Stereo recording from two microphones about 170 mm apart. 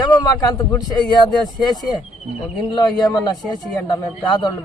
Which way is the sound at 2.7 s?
25° left (ahead or behind).